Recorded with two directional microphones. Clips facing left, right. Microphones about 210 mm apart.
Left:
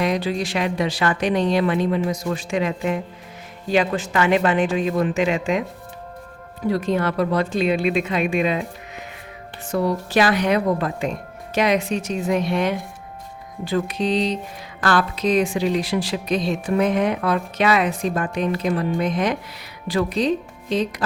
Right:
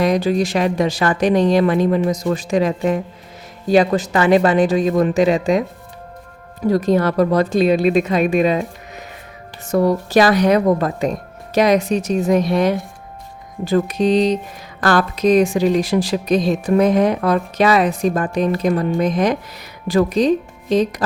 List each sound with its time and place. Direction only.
0.0 s a woman's voice: 45° right (ahead or behind)
6.7 s a woman's voice: 40° right (ahead or behind)
9.7 s a woman's voice: 40° right (ahead or behind)